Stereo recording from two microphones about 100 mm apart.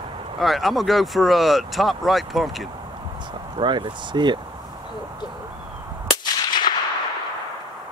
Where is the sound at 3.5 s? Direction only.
50° right (ahead or behind).